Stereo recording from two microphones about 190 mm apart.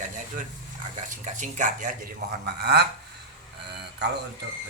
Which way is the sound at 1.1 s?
40° right (ahead or behind).